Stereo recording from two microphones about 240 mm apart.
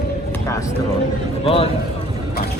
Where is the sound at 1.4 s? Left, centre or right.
Left.